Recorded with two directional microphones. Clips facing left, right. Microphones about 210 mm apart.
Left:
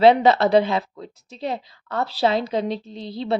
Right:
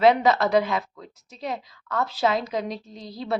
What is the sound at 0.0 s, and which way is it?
A woman's voice, 30° left (ahead or behind).